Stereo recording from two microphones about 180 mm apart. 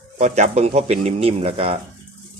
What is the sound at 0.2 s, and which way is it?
Speech, 40° right (ahead or behind).